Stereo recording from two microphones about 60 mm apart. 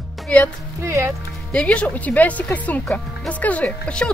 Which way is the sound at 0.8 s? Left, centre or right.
Right.